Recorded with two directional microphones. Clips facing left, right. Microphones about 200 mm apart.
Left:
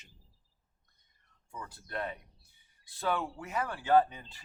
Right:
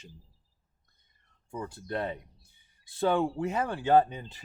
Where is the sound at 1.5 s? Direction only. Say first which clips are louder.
Right 6 dB; 30° right (ahead or behind).